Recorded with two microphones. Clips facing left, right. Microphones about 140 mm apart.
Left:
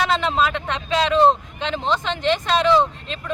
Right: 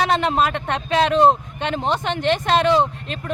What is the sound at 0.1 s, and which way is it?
Speech, 55° right (ahead or behind).